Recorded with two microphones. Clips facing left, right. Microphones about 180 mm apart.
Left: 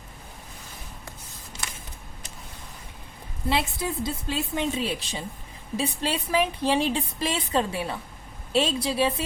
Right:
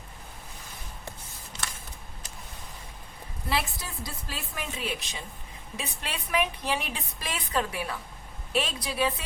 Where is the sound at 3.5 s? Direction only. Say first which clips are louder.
Left 5 dB; 25° left (ahead or behind).